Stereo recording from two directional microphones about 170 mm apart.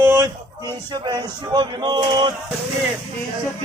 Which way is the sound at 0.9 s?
25° right (ahead or behind).